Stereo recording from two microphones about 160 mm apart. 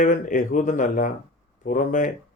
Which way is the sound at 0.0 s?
55° left (ahead or behind).